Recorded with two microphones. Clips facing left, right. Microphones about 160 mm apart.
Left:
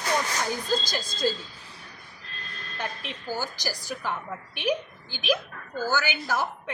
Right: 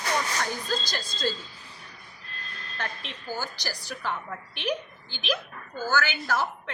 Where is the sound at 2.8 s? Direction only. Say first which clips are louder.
Left 2 dB; 10° left (ahead or behind).